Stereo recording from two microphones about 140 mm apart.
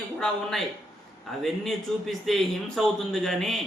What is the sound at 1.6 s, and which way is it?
A man's voice, centre (ahead or behind).